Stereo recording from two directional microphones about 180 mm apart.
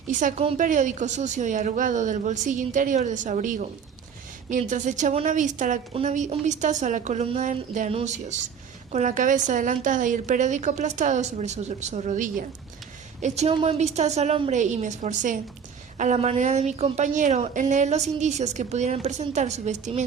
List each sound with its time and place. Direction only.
0.1 s a woman's voice: 45° right (ahead or behind)